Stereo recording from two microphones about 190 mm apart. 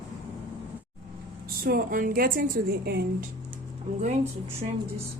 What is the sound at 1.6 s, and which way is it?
A woman's voice, 50° right (ahead or behind).